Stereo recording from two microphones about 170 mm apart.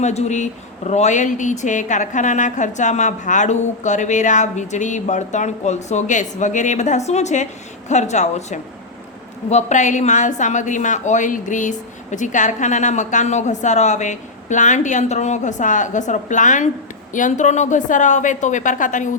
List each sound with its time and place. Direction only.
0.0 s speech: 40° left (ahead or behind)